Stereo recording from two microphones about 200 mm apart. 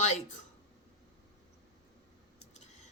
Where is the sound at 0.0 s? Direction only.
35° left (ahead or behind).